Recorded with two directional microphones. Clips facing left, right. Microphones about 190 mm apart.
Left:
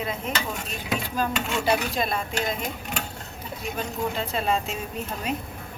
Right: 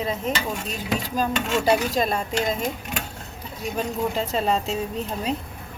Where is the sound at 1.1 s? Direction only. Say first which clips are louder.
Right 4 dB; 40° right (ahead or behind).